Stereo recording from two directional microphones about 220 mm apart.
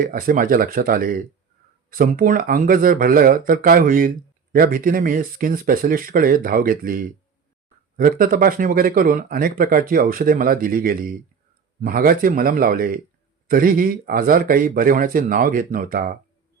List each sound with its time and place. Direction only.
0.0 s speech: 40° right (ahead or behind)